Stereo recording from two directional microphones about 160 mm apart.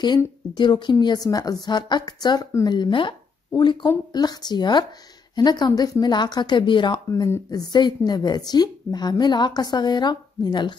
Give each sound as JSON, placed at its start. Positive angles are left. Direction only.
{"t": 0.6, "sound": "a woman's voice", "side_deg": 30}